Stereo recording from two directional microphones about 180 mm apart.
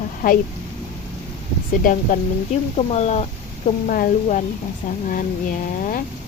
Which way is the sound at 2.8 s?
35° left (ahead or behind).